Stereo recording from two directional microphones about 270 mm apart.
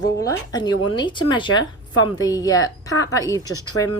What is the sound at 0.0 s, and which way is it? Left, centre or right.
Speech, centre.